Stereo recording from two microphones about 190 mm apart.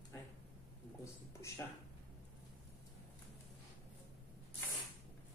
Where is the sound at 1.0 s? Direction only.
15° left (ahead or behind).